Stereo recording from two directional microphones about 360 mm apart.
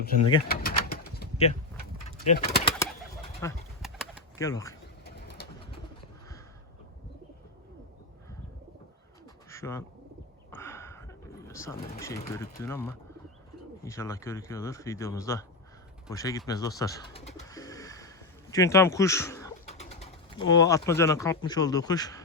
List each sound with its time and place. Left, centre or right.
0.4 s bird: left
2.1 s speech: left
3.4 s pigeon: centre
4.4 s speech: centre
5.0 s bird: left
9.5 s bird: centre
10.5 s a sound: centre
11.4 s speech: centre
16.0 s bird: centre
18.5 s speech: centre